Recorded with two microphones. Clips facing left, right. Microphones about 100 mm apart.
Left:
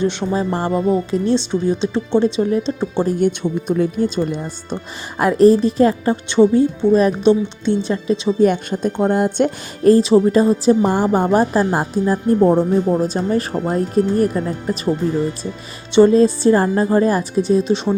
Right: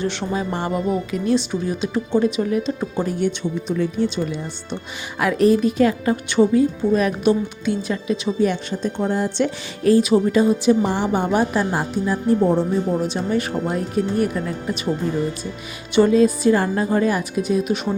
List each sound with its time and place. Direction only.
0.0 s a woman's voice: 20° left (ahead or behind)
0.3 s a woman's voice: 35° left (ahead or behind)
3.2 s speech: 50° left (ahead or behind)
5.2 s a woman's voice: 35° left (ahead or behind)
8.4 s speech: 50° left (ahead or behind)
10.0 s a woman's voice: 30° left (ahead or behind); by 12.6 s 50° left (ahead or behind)
12.9 s a woman's voice: 35° left (ahead or behind)
16.0 s a woman's voice: 30° left (ahead or behind)